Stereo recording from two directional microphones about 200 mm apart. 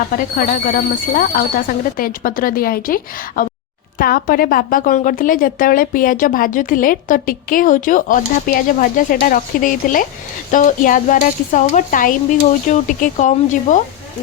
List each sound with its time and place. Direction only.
0.1 s a woman's voice: 45° left (ahead or behind)